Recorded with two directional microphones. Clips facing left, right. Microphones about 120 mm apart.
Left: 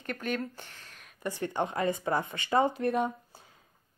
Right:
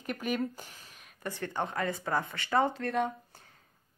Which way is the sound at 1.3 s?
15° left (ahead or behind).